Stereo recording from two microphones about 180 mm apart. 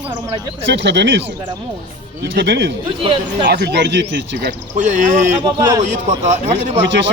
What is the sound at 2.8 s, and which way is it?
Speech, 25° right (ahead or behind).